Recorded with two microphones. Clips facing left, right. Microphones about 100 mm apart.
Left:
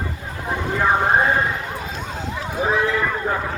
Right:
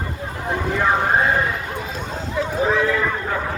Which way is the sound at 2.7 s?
15° left (ahead or behind).